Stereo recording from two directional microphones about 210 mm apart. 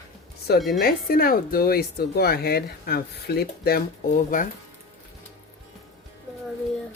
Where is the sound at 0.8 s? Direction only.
45° left (ahead or behind).